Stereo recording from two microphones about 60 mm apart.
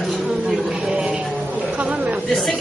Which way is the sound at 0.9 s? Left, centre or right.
Centre.